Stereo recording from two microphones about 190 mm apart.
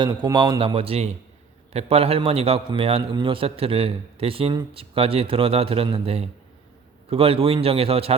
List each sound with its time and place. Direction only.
0.0 s a man's voice: 20° right (ahead or behind)